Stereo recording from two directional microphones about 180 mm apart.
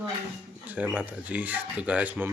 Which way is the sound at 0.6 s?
10° right (ahead or behind).